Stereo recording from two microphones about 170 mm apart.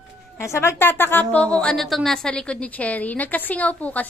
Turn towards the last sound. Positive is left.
turn(degrees=10)  # may be behind; listen again after turning